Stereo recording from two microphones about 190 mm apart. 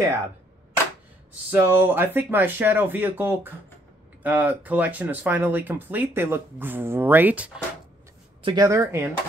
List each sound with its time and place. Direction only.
1.5 s speech: 10° right (ahead or behind)
8.4 s speech: 25° right (ahead or behind)